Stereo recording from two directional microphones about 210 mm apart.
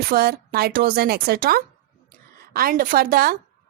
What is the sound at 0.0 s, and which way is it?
Speech, 45° right (ahead or behind).